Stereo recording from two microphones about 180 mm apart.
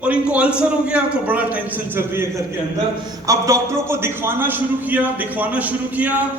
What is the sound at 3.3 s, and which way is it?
Speech, 15° right (ahead or behind).